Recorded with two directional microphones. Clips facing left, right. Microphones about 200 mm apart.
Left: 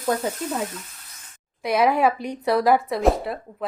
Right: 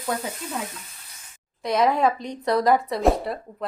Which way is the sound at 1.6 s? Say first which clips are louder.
Left 1 dB; 10° left (ahead or behind).